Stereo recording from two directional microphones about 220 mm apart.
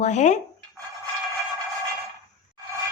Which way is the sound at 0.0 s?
30° left (ahead or behind).